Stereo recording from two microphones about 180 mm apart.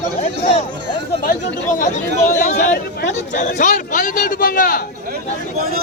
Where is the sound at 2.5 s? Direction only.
45° left (ahead or behind).